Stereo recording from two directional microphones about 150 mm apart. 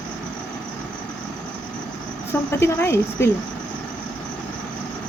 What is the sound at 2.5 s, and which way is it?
Speech, 15° left (ahead or behind).